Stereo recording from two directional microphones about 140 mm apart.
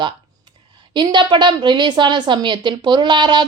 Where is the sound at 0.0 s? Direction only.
35° right (ahead or behind).